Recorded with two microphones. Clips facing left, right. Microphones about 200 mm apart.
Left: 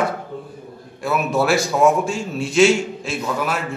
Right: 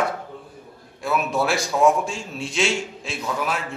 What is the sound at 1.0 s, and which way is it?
A man's voice, 5° left (ahead or behind).